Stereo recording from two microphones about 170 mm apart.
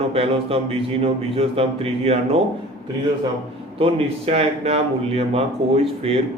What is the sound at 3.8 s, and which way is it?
A man's voice, 35° right (ahead or behind).